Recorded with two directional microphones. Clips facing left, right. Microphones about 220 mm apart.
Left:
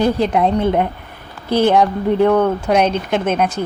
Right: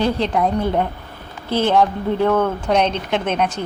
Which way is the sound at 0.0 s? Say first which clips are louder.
Left 3 dB; 10° left (ahead or behind).